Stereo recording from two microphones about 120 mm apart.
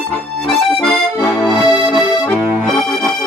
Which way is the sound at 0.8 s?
15° left (ahead or behind).